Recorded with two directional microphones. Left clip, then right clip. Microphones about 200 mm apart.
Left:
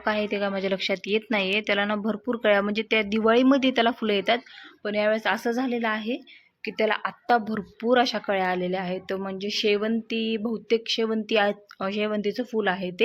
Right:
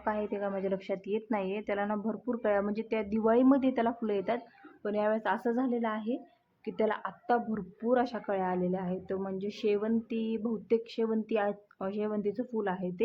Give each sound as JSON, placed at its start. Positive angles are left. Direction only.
{"t": 0.1, "sound": "a woman's voice", "side_deg": 20}